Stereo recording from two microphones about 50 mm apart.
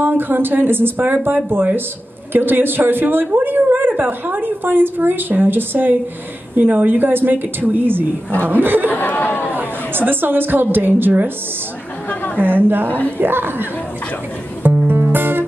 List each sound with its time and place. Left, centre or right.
0.0 s a woman's voice: right
8.9 s speech: left
9.5 s a woman's voice: right
12.4 s speech: right
12.8 s a woman's voice: left
13.2 s speech: right
14.6 s music: right